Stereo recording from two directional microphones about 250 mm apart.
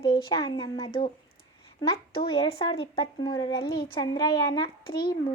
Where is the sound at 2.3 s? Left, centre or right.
Left.